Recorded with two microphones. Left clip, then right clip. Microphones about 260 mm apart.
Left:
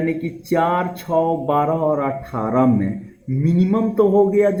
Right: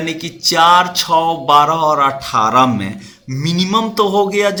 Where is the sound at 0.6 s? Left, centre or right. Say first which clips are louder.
Right 10 dB; right.